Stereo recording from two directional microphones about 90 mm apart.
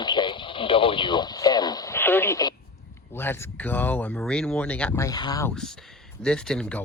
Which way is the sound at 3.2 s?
20° left (ahead or behind).